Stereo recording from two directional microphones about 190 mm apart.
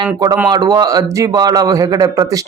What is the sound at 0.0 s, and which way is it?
A man's voice, 20° right (ahead or behind).